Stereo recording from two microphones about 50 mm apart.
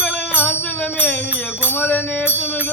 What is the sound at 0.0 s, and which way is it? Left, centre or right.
Music, left.